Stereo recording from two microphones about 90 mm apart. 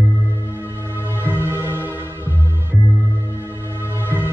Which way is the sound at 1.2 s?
25° right (ahead or behind).